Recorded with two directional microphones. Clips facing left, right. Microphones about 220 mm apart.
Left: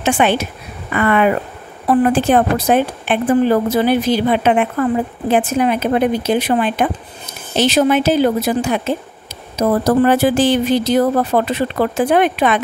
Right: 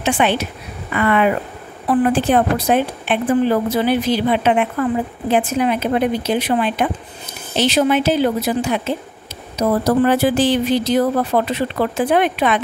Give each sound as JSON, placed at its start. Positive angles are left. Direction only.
{"t": 0.0, "sound": "a woman's voice", "side_deg": 45}